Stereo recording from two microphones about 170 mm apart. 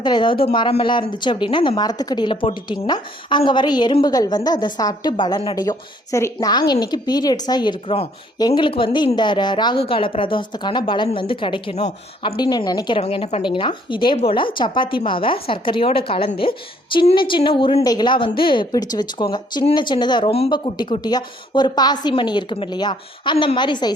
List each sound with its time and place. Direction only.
0.0 s a woman's voice: 25° left (ahead or behind)
12.4 s a woman's voice: 25° left (ahead or behind)
13.0 s a woman's voice: 40° left (ahead or behind)